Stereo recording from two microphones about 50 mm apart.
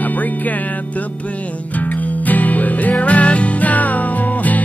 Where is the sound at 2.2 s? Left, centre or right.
Left.